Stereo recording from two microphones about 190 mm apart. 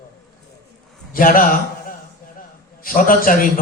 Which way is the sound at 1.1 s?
50° left (ahead or behind).